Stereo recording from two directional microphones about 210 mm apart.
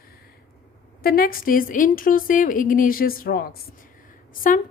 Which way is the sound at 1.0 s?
45° left (ahead or behind).